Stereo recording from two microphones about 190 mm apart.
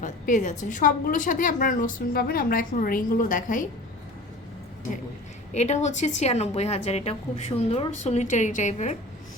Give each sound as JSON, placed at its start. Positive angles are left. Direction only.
{"t": 0.0, "sound": "a woman's voice", "side_deg": 40}
{"t": 5.5, "sound": "a woman's voice", "side_deg": 35}